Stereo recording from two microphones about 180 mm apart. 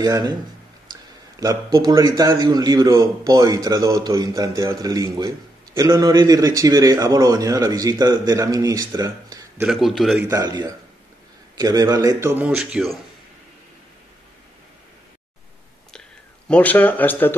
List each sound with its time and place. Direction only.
0.0 s a man's voice: 20° right (ahead or behind)
9.6 s speech: centre (ahead or behind)
10.2 s a man's voice: 20° right (ahead or behind); by 13.0 s centre (ahead or behind)
16.4 s speech: 10° left (ahead or behind)